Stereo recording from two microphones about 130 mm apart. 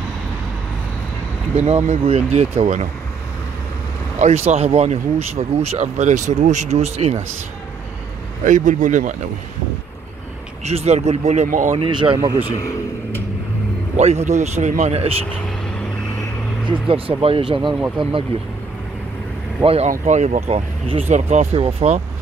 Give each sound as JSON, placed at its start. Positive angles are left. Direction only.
{"t": 1.5, "sound": "speech", "side_deg": -55}
{"t": 2.6, "sound": "speech", "side_deg": -65}
{"t": 4.2, "sound": "speech", "side_deg": -55}
{"t": 8.5, "sound": "speech", "side_deg": -75}
{"t": 10.6, "sound": "speech", "side_deg": -55}
{"t": 11.8, "sound": "speech", "side_deg": -40}
{"t": 12.2, "sound": "speech", "side_deg": -20}
{"t": 13.9, "sound": "speech", "side_deg": -55}
{"t": 16.6, "sound": "speech", "side_deg": -40}
{"t": 17.7, "sound": "speech", "side_deg": -5}
{"t": 19.6, "sound": "speech", "side_deg": -50}
{"t": 19.9, "sound": "speech", "side_deg": -65}